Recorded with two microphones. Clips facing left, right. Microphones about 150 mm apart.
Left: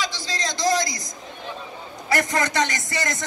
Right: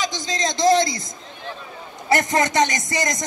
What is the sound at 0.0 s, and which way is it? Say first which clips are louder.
A man's voice: right 4 dB; 20° right (ahead or behind).